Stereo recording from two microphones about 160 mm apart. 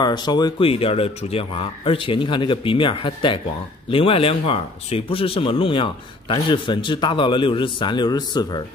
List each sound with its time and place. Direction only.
0.0 s speech: 25° left (ahead or behind)